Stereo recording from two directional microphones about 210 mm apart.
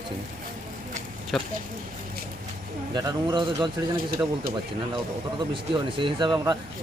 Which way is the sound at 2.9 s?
20° right (ahead or behind).